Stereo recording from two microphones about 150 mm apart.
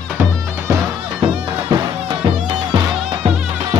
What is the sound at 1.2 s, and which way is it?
Music, 35° right (ahead or behind).